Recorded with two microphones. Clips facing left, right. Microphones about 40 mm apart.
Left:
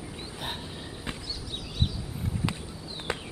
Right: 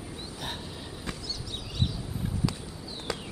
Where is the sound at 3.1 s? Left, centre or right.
Left.